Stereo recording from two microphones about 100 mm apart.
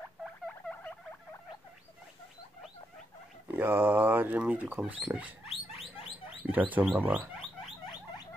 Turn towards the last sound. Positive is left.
turn(degrees=-15)  # may be behind; listen again after turning